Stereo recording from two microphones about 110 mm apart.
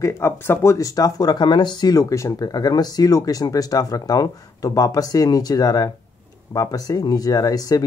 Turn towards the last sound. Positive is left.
turn(degrees=35)  # may be behind; listen again after turning